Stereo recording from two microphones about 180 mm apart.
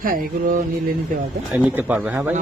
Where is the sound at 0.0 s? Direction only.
55° right (ahead or behind).